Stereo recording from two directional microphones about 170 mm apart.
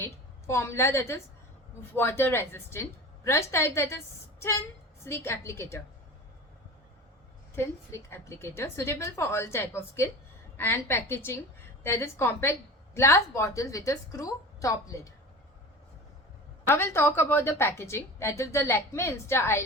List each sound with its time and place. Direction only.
0.0 s a woman's voice: 15° left (ahead or behind)
7.5 s a woman's voice: 15° left (ahead or behind)
16.6 s a woman's voice: 15° left (ahead or behind)